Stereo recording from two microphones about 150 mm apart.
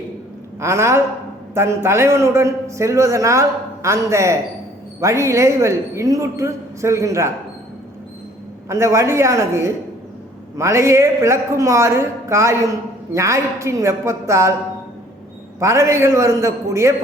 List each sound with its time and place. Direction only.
0.6 s a man's voice: 20° right (ahead or behind)
8.7 s a man's voice: 20° right (ahead or behind)
15.6 s a man's voice: 20° right (ahead or behind)